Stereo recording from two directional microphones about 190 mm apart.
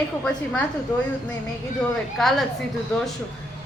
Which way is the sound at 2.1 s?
Centre (ahead or behind).